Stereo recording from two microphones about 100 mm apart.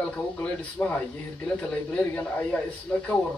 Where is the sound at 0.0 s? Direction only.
10° left (ahead or behind).